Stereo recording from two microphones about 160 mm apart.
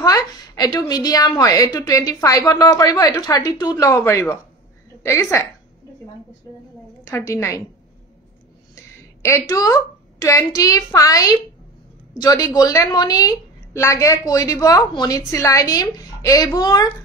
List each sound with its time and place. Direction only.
0.0 s a woman's voice: 25° left (ahead or behind)
7.1 s a woman's voice: 15° left (ahead or behind)
9.2 s a woman's voice: 20° left (ahead or behind)